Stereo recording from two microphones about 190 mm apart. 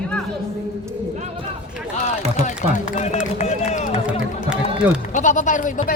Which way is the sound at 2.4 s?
40° left (ahead or behind).